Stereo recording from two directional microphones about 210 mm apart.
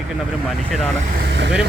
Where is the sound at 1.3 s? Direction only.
55° right (ahead or behind).